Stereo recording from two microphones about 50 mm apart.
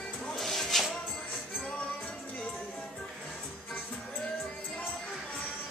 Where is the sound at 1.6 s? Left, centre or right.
Centre.